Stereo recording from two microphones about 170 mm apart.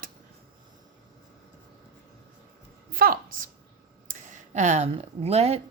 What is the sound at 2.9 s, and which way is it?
Speech, 60° right (ahead or behind).